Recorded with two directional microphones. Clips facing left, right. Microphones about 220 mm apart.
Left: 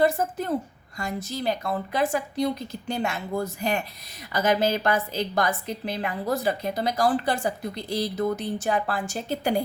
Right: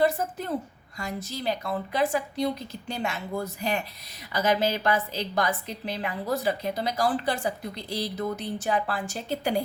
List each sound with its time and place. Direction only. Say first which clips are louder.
0.0 s a woman's voice: left 2 dB; 45° left (ahead or behind)